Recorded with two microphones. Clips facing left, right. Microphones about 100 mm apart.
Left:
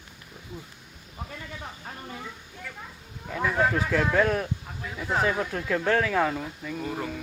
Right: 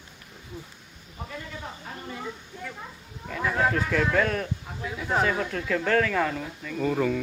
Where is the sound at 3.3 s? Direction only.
10° left (ahead or behind).